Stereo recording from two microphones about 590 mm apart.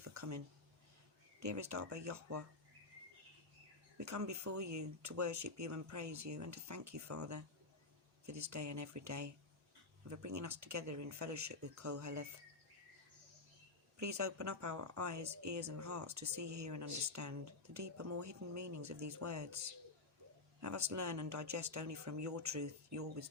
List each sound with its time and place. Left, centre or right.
0.0 s a sound: right
1.4 s speech: right
3.9 s speech: right
14.0 s speech: right
20.6 s speech: right